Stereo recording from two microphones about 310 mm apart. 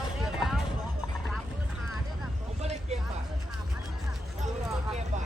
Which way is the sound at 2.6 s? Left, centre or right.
Right.